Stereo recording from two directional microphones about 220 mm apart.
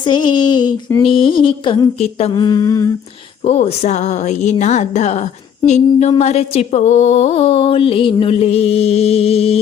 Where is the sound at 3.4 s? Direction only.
30° left (ahead or behind).